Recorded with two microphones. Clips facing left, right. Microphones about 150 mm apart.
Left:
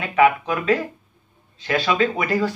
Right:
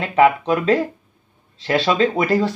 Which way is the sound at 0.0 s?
30° right (ahead or behind).